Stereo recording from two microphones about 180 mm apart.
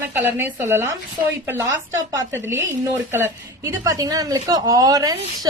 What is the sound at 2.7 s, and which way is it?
A woman's voice, 15° right (ahead or behind).